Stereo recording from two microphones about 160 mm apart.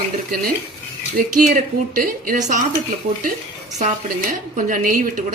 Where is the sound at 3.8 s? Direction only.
55° right (ahead or behind).